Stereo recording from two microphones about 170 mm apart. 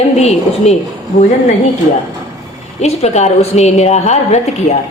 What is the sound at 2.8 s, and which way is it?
A woman's voice, 40° left (ahead or behind).